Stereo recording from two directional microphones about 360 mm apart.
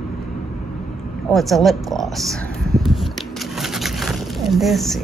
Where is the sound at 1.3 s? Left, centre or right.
Centre.